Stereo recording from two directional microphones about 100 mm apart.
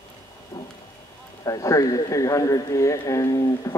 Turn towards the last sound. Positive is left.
turn(degrees=40)  # may be behind; listen again after turning